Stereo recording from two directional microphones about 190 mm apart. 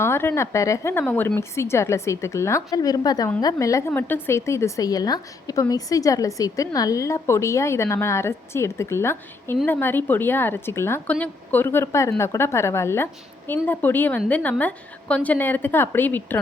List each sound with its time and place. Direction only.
0.0 s a woman's voice: 15° left (ahead or behind)